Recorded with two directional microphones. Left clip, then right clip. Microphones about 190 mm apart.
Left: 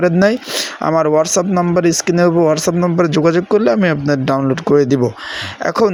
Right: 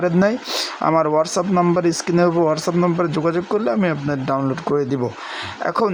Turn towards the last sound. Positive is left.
turn(degrees=25)  # may be behind; listen again after turning